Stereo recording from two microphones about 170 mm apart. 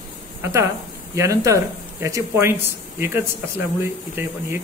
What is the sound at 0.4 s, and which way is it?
A man's voice, 15° right (ahead or behind).